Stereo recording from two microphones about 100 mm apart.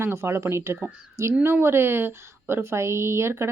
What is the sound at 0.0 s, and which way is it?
Speech, 25° right (ahead or behind).